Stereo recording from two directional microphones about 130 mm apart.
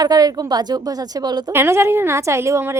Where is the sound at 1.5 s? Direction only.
20° right (ahead or behind).